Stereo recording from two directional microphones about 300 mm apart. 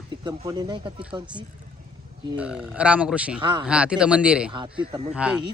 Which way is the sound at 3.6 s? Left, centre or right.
Centre.